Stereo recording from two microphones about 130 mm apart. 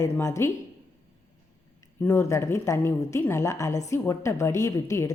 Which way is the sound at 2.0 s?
20° left (ahead or behind).